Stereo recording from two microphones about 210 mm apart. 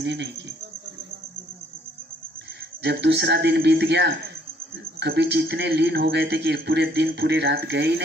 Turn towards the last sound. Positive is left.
turn(degrees=-55)  # may be behind; listen again after turning